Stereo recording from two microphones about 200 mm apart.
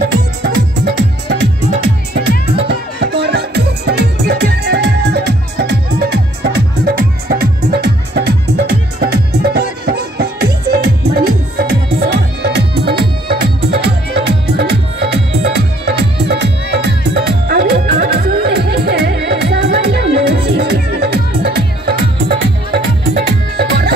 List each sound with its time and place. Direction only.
0.4 s music: 55° right (ahead or behind)